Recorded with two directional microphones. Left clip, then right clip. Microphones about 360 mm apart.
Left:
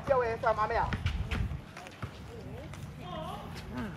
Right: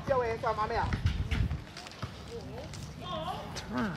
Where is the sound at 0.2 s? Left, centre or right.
Left.